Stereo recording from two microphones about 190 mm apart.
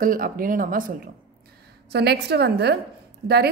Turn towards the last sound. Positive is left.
turn(degrees=-55)  # may be behind; listen again after turning